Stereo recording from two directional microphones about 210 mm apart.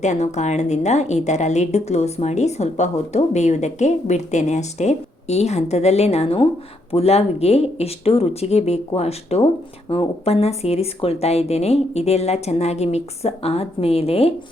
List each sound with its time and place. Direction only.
0.0 s a woman's voice: 35° left (ahead or behind)